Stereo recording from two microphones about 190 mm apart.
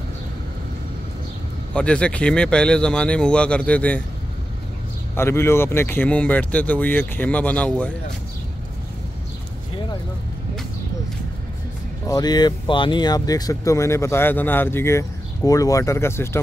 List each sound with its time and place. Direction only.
1.7 s speech: 5° left (ahead or behind)
5.1 s speech: 15° left (ahead or behind)
12.1 s speech: 20° left (ahead or behind)